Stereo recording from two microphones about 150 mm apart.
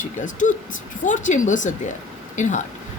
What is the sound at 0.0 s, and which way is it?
A woman's voice, 60° left (ahead or behind).